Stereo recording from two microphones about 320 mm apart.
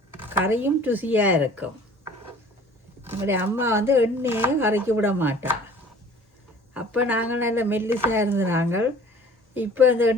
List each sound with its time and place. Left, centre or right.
0.2 s speech: centre
3.0 s speech: centre
6.7 s speech: centre